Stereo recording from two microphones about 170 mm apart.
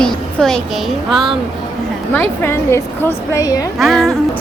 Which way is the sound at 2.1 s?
15° left (ahead or behind).